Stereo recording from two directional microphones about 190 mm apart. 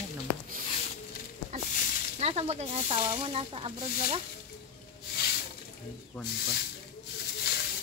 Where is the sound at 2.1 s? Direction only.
35° right (ahead or behind).